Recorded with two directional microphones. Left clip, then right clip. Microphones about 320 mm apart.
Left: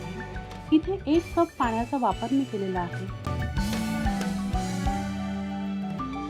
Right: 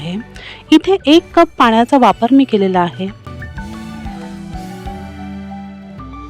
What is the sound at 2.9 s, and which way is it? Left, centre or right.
Music, centre.